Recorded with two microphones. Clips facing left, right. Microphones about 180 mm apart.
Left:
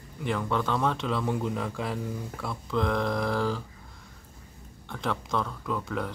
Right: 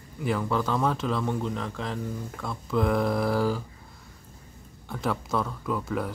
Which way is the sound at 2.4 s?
5° right (ahead or behind).